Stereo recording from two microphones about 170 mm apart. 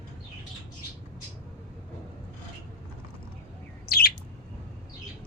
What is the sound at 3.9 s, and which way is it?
Bird, 65° left (ahead or behind).